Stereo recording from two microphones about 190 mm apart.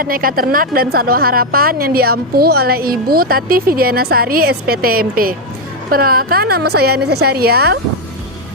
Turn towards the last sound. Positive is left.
turn(degrees=-55)  # may be behind; listen again after turning